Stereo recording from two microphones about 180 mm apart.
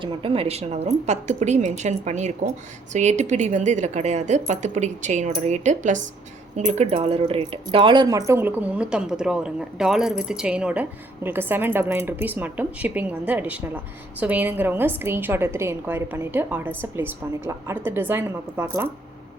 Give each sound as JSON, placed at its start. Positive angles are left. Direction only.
{"t": 0.0, "sound": "a woman's voice", "side_deg": -30}